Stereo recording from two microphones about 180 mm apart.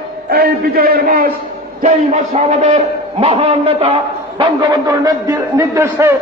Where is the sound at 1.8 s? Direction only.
40° right (ahead or behind).